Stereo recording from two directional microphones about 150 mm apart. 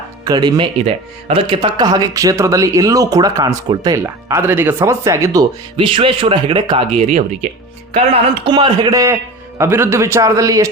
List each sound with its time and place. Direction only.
0.3 s speech: 30° right (ahead or behind)
5.7 s speech: 35° right (ahead or behind)